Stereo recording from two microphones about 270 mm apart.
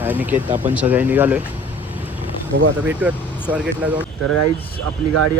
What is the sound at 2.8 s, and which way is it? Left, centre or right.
Speech, centre.